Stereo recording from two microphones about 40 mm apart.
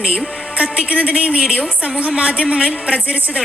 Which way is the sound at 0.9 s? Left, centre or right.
Right.